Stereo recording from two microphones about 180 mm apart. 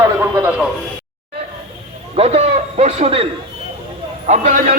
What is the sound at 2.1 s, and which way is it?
A man's voice, 35° right (ahead or behind).